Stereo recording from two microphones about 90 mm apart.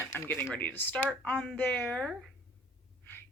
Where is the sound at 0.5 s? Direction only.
20° left (ahead or behind).